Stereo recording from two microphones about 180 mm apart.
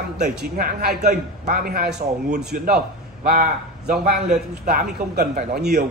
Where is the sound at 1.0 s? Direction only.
45° right (ahead or behind).